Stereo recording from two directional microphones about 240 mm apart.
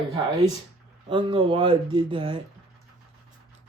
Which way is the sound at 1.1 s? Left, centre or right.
Right.